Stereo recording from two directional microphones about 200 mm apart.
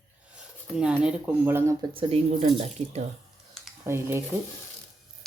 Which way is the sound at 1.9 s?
30° right (ahead or behind).